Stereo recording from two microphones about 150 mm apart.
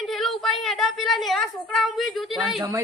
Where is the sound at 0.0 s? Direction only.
Centre (ahead or behind).